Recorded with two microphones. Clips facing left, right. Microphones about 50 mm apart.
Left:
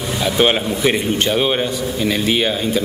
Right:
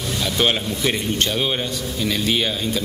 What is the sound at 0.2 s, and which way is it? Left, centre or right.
A man's voice, centre.